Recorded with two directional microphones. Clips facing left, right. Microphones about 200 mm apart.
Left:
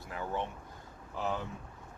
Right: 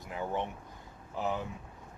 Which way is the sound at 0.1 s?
15° right (ahead or behind).